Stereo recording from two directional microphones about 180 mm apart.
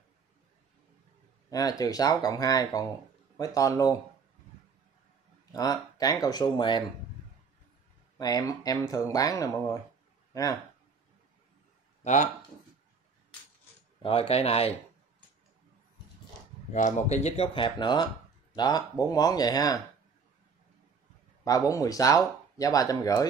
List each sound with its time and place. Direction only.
1.5 s speech: 20° left (ahead or behind)
5.5 s speech: 20° left (ahead or behind)
8.2 s speech: 20° left (ahead or behind)
12.0 s speech: 40° left (ahead or behind)
14.0 s speech: 30° left (ahead or behind)
16.7 s speech: 40° left (ahead or behind); by 19.8 s 20° left (ahead or behind)
21.5 s speech: 20° left (ahead or behind)